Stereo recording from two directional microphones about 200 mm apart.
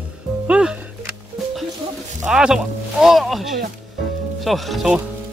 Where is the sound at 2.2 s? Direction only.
5° right (ahead or behind).